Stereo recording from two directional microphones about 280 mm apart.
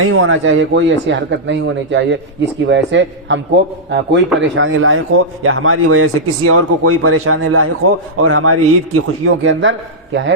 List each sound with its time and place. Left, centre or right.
0.0 s a man's voice: right